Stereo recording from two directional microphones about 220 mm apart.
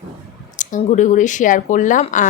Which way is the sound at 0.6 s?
35° left (ahead or behind).